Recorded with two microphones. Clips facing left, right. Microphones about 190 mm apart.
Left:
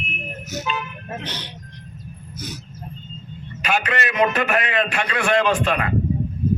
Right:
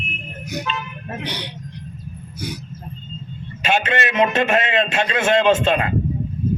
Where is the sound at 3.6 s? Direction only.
25° right (ahead or behind).